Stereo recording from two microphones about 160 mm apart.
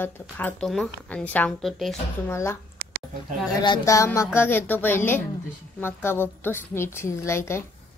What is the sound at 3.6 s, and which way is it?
A woman's voice, 25° left (ahead or behind).